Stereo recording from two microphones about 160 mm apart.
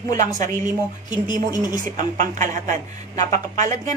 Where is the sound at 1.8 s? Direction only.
55° right (ahead or behind).